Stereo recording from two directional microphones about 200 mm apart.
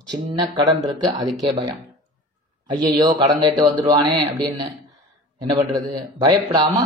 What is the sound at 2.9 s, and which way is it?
Speech, 20° right (ahead or behind).